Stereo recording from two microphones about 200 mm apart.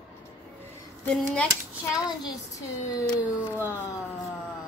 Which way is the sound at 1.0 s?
5° left (ahead or behind).